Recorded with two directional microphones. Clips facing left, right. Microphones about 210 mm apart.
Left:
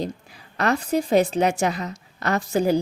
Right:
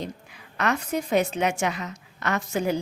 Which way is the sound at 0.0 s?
35° left (ahead or behind).